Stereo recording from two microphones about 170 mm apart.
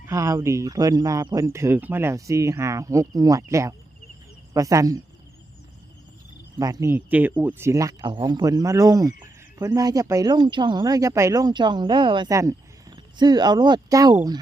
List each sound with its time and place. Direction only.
0.1 s speech: 20° right (ahead or behind)
6.6 s speech: 20° right (ahead or behind)